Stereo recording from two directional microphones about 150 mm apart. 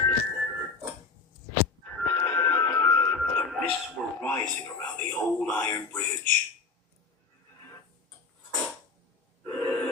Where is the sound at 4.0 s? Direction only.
10° left (ahead or behind).